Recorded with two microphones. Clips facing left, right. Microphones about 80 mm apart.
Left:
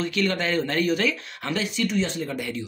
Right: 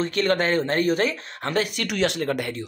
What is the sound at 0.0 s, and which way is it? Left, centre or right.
Speech, right.